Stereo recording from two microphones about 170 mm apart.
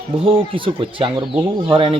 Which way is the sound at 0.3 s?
30° right (ahead or behind).